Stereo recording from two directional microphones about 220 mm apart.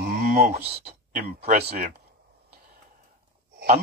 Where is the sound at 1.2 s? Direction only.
45° right (ahead or behind).